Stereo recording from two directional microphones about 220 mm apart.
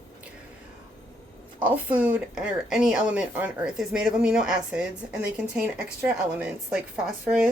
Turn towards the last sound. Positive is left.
turn(degrees=-5)  # may be behind; listen again after turning